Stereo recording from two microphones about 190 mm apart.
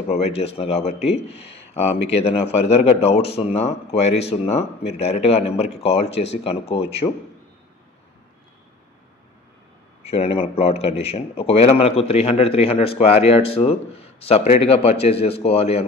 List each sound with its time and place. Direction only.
0.1 s a man's voice: 35° left (ahead or behind)
10.0 s a man's voice: 30° left (ahead or behind)